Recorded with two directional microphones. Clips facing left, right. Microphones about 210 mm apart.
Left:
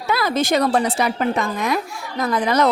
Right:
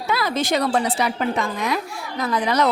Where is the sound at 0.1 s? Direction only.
45° left (ahead or behind).